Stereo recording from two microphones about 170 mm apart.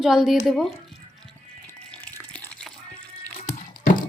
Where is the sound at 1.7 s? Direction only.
10° left (ahead or behind).